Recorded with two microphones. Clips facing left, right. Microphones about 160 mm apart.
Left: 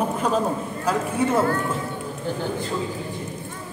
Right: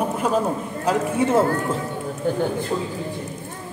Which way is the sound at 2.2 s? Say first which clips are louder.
Right 6 dB; 50° right (ahead or behind).